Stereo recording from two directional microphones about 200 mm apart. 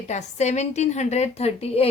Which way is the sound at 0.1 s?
35° left (ahead or behind).